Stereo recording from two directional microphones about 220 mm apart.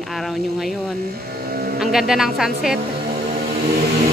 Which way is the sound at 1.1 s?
45° right (ahead or behind).